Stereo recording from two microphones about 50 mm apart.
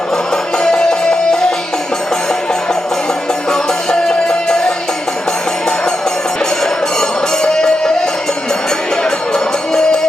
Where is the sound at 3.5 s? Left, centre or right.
Centre.